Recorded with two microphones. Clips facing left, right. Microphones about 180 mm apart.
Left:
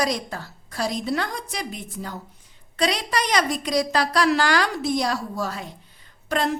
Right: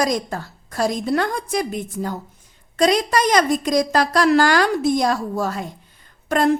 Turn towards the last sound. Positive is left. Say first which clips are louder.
# right 6 dB
turn(degrees=-50)  # may be behind; listen again after turning